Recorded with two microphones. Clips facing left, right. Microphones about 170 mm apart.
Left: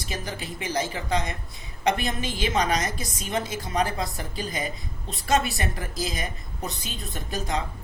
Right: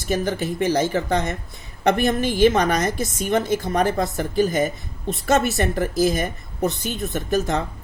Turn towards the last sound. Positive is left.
turn(degrees=-60)  # may be behind; listen again after turning